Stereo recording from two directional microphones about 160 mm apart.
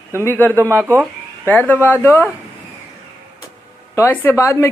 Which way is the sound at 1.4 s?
10° left (ahead or behind).